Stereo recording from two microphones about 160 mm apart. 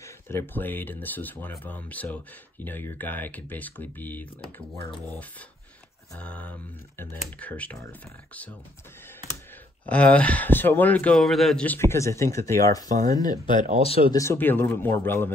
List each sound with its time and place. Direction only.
0.0 s a man's voice: 15° left (ahead or behind)
6.1 s a man's voice: 10° left (ahead or behind)
9.8 s a man's voice: 10° left (ahead or behind); by 13.6 s 25° left (ahead or behind)
13.8 s speech: 35° left (ahead or behind)
14.1 s a man's voice: 20° left (ahead or behind)